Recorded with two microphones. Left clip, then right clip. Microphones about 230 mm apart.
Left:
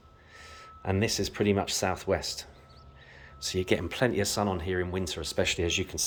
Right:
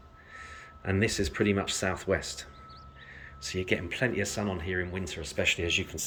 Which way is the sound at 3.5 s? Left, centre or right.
Left.